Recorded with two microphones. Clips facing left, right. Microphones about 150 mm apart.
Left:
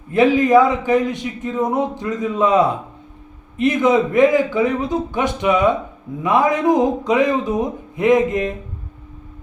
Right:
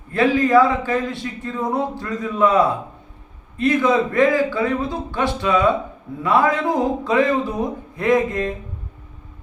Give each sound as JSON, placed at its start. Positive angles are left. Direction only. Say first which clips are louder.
{"t": 0.1, "sound": "a man's voice", "louder": "left 3 dB", "side_deg": 20}